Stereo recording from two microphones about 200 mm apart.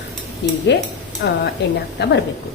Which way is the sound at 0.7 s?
60° left (ahead or behind).